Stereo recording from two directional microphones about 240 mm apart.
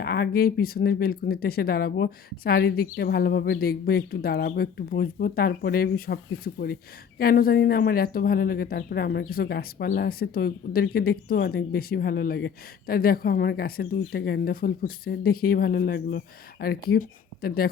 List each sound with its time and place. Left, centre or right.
0.0 s speech: left